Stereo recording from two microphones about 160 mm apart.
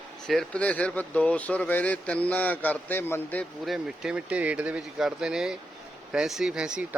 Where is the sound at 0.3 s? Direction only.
5° left (ahead or behind).